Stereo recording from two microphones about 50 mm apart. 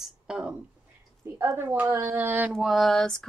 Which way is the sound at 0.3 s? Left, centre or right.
Centre.